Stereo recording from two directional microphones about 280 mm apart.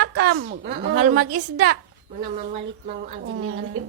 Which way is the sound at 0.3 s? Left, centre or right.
Right.